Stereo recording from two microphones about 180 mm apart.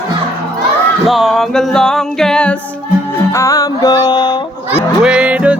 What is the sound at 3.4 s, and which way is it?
Music, 20° left (ahead or behind).